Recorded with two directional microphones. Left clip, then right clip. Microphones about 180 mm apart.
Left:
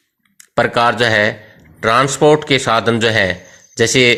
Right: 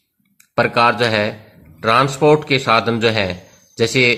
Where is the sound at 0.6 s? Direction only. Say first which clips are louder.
Left 1 dB; 30° left (ahead or behind).